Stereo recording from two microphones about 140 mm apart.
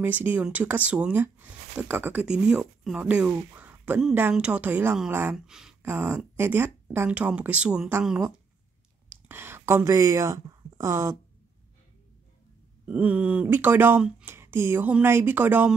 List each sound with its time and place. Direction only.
0.0 s speech: 15° right (ahead or behind)
5.8 s speech: 20° right (ahead or behind)
12.8 s speech: 10° right (ahead or behind)